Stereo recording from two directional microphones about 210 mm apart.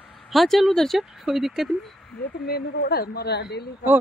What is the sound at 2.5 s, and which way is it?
Speech, 50° left (ahead or behind).